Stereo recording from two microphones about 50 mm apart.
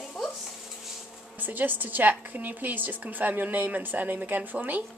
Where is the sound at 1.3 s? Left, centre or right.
Right.